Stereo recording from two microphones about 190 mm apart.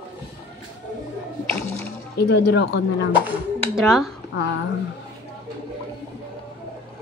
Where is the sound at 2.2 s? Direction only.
60° left (ahead or behind).